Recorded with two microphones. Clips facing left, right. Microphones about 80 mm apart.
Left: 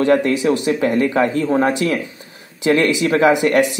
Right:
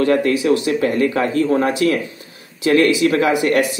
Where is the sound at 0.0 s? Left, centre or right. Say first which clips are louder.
Left 1 dB; left.